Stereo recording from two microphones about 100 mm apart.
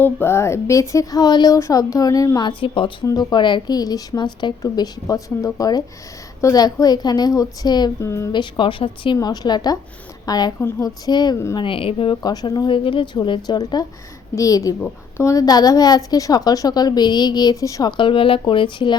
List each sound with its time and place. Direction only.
0.0 s a woman's voice: 25° left (ahead or behind); by 1.5 s 45° left (ahead or behind)
1.5 s a woman's voice: 30° left (ahead or behind)
2.4 s speech: 60° left (ahead or behind)
3.1 s speech: 40° left (ahead or behind)
4.6 s a woman's voice: 35° left (ahead or behind)
8.0 s a woman's voice: 30° left (ahead or behind)
8.3 s speech: 50° left (ahead or behind)
9.1 s a woman's voice: 40° left (ahead or behind)
11.5 s speech: 60° left (ahead or behind)
12.2 s speech: 40° left (ahead or behind)
13.6 s a woman's voice: 40° left (ahead or behind)
17.9 s speech: 60° left (ahead or behind)